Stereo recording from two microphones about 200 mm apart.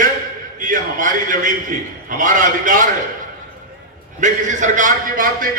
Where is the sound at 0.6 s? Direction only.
40° right (ahead or behind).